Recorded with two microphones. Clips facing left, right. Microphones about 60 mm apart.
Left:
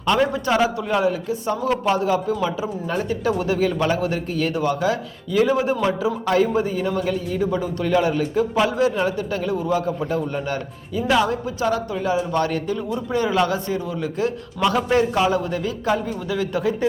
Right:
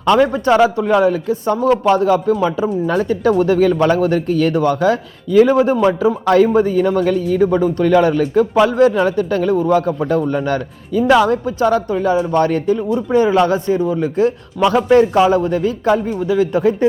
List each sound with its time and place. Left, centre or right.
0.0 s a man's voice: right
0.3 s a man's voice: right
2.8 s speech: right
3.1 s a man's voice: right
7.9 s a man's voice: right
12.3 s a man's voice: right